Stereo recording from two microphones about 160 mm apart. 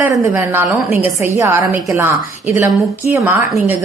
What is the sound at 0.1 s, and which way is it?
A woman's voice, 15° right (ahead or behind).